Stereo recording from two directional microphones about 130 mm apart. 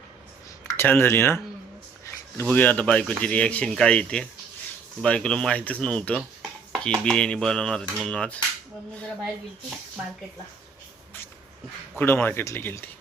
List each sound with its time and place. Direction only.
0.8 s speech: 15° left (ahead or behind)
11.9 s speech: 15° left (ahead or behind)